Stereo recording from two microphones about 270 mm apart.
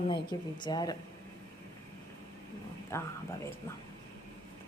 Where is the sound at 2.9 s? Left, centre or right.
Centre.